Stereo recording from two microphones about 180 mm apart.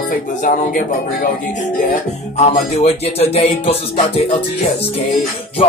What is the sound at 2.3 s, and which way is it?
Music, 40° left (ahead or behind).